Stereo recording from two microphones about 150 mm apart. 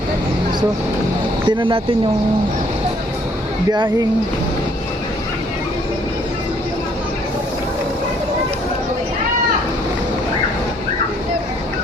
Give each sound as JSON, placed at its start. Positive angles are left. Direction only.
{"t": 1.5, "sound": "speech", "side_deg": -35}